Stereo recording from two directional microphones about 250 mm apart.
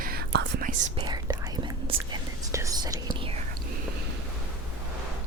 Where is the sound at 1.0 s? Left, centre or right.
Centre.